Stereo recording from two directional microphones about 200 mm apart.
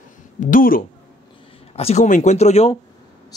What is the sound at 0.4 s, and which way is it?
Speech, 45° left (ahead or behind).